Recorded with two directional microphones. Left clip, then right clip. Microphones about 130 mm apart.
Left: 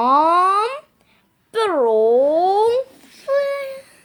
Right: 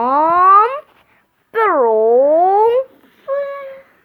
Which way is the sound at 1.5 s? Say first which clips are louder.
Right 5 dB; 15° left (ahead or behind).